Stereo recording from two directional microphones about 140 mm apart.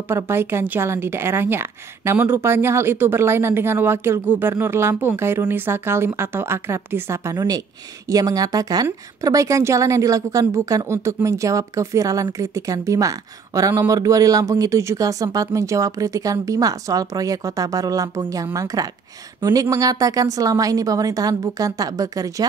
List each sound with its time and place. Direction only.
0.1 s a woman's voice: 15° right (ahead or behind)